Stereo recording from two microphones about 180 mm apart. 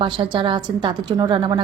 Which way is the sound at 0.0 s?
25° right (ahead or behind).